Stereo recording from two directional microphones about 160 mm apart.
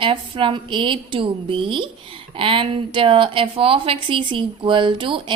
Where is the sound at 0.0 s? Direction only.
30° right (ahead or behind).